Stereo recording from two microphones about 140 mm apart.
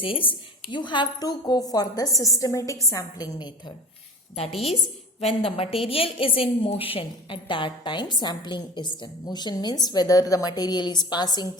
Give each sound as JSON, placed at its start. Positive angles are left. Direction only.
{"t": 0.0, "sound": "a woman's voice", "side_deg": 40}
{"t": 5.2, "sound": "a woman's voice", "side_deg": 45}